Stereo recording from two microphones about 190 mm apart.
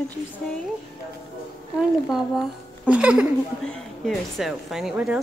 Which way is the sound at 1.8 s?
Centre (ahead or behind).